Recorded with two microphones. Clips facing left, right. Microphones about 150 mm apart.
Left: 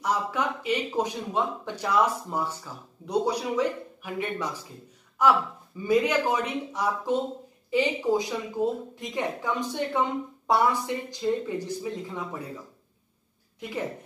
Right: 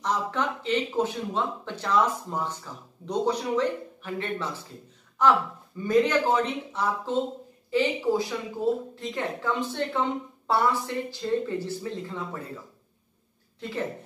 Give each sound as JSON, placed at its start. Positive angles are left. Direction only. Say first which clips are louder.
{"t": 0.0, "sound": "speech", "louder": "even", "side_deg": 10}
{"t": 13.6, "sound": "a woman's voice", "louder": "right 1 dB", "side_deg": 15}